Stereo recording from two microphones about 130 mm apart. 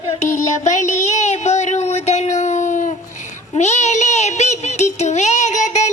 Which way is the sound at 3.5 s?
60° left (ahead or behind).